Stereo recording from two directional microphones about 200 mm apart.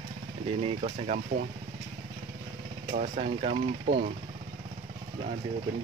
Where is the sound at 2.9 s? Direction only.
30° right (ahead or behind).